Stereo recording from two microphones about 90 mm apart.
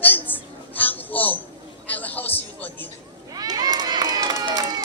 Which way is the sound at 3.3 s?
45° right (ahead or behind).